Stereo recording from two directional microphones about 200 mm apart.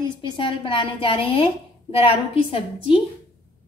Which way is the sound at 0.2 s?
25° left (ahead or behind).